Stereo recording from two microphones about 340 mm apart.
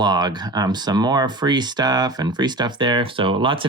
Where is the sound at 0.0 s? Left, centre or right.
Centre.